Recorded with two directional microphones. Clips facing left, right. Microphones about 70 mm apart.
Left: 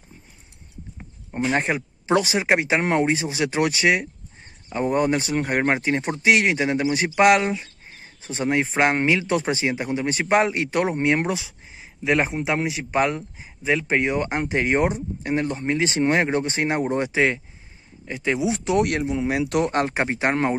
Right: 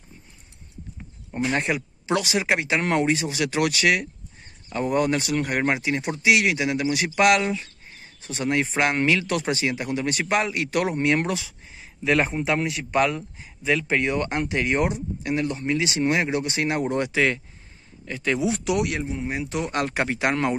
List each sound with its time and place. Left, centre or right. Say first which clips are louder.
1.5 s speech: left 3 dB; left
19.0 s speech: left 6 dB; left
19.7 s speech: left 2 dB; left